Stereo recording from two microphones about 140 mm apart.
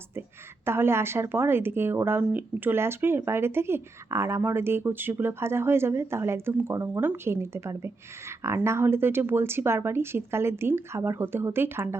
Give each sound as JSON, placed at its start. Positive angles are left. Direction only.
{"t": 0.6, "sound": "a woman's voice", "side_deg": -15}